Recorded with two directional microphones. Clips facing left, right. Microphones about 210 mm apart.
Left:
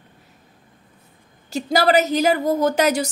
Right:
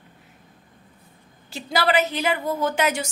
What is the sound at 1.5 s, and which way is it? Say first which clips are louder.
A woman's voice: left 5 dB; 40° left (ahead or behind).